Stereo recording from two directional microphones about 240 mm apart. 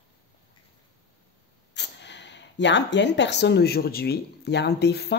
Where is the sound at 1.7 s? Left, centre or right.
Left.